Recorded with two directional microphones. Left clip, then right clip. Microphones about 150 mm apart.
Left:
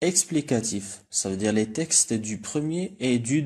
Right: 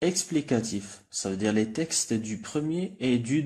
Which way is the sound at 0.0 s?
25° left (ahead or behind).